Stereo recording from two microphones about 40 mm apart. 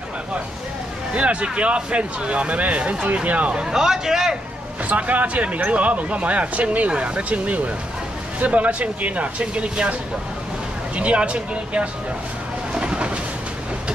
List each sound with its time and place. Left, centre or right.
1.1 s speech: right
3.6 s a man's voice: centre
4.8 s speech: right
11.0 s speech: right
12.7 s train: right